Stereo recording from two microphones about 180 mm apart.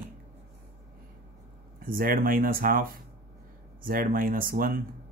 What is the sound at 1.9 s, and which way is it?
Speech, 50° right (ahead or behind).